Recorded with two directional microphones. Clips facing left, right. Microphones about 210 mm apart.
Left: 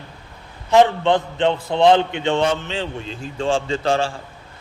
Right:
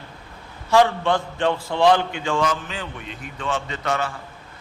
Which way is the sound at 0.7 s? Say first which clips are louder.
Left 3 dB; 20° left (ahead or behind).